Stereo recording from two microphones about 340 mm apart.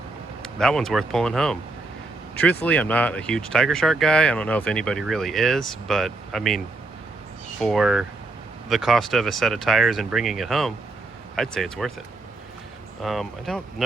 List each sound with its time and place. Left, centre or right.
0.4 s speech: centre
7.6 s speech: centre
13.0 s speech: centre